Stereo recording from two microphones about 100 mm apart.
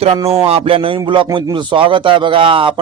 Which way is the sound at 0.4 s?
80° right.